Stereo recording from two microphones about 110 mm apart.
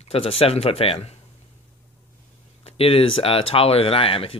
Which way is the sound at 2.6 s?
60° left (ahead or behind).